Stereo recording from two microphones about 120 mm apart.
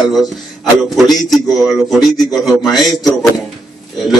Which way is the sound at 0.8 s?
Centre (ahead or behind).